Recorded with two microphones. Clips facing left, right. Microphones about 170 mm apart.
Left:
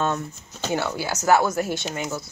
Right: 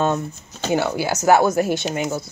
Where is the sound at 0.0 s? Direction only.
20° right (ahead or behind).